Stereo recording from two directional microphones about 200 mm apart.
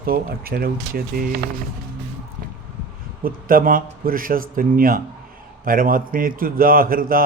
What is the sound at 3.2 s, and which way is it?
Speech, 45° right (ahead or behind).